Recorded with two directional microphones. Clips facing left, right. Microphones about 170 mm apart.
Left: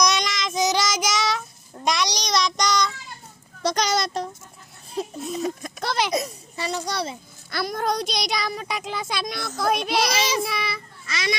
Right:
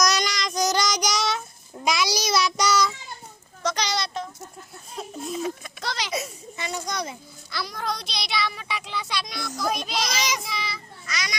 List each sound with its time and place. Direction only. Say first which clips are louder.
0.0 s child singing: left 1 dB; centre (ahead or behind)
3.8 s a child's voice: left 4 dB; 45° left (ahead or behind)
5.4 s a child's voice: left 2 dB; 50° left (ahead or behind)
6.1 s a child's voice: left 4 dB; 35° left (ahead or behind)
7.5 s a child's voice: left 6 dB; 50° left (ahead or behind)
11.0 s a child's voice: left 6 dB; 25° left (ahead or behind)